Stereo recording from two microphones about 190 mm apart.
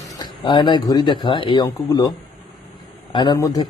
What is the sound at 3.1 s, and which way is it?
Speech, 25° left (ahead or behind).